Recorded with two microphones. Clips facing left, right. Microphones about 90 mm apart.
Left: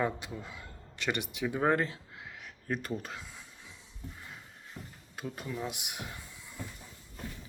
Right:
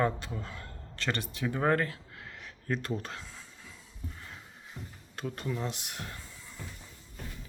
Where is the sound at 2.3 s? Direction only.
5° left (ahead or behind).